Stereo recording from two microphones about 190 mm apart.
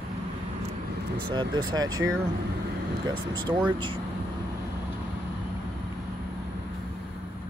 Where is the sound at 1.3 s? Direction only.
20° right (ahead or behind).